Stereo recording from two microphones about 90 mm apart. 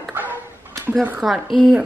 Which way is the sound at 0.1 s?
20° right (ahead or behind).